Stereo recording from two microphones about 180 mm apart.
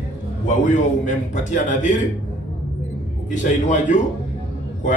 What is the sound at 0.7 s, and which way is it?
A man's voice, 45° left (ahead or behind).